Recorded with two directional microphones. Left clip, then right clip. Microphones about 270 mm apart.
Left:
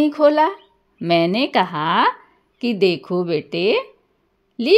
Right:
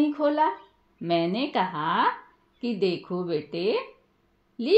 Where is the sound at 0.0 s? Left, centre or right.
Left.